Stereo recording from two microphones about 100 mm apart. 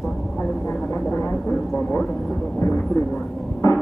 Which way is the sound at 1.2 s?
5° left (ahead or behind).